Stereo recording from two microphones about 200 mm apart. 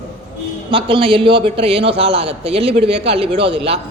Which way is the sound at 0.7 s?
25° right (ahead or behind).